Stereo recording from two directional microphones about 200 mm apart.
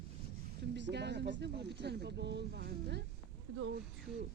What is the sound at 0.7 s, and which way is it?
Speech, 60° right (ahead or behind).